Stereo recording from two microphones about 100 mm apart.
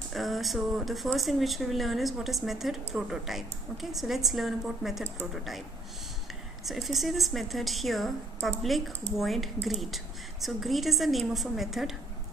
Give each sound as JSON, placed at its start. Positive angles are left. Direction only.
{"t": 0.1, "sound": "speech", "side_deg": 0}
{"t": 6.6, "sound": "speech", "side_deg": 0}